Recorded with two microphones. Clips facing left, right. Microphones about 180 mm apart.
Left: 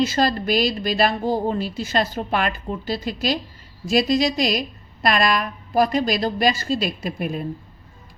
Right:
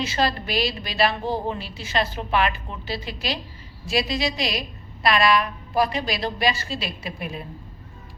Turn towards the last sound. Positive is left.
turn(degrees=45)  # may be behind; listen again after turning